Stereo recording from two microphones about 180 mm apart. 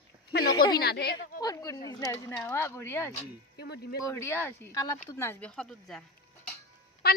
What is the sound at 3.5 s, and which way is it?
Speech, 65° left (ahead or behind).